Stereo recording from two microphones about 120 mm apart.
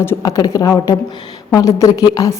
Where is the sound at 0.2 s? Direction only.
30° left (ahead or behind).